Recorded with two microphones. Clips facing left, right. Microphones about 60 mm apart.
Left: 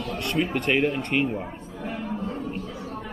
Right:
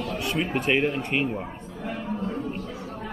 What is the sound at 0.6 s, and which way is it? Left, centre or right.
Speech, centre.